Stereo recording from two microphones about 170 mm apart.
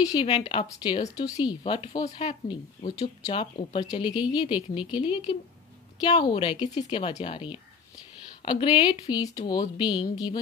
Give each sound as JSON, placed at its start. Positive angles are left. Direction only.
{"t": 0.1, "sound": "speech", "side_deg": 25}
{"t": 1.6, "sound": "speech", "side_deg": 35}
{"t": 3.0, "sound": "speech", "side_deg": 20}